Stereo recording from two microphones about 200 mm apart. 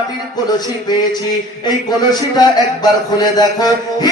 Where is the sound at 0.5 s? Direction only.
20° left (ahead or behind).